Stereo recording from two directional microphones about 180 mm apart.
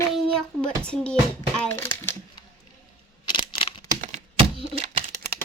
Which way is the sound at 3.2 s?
30° left (ahead or behind).